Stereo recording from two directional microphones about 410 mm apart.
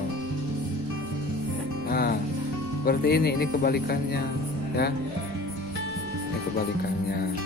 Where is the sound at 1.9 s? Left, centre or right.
Left.